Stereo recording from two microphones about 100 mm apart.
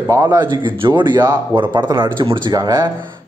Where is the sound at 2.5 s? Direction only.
40° right (ahead or behind).